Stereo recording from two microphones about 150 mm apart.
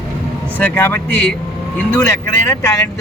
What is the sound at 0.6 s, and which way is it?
A man's voice, 15° left (ahead or behind).